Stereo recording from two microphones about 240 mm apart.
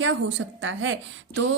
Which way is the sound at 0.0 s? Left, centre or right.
Right.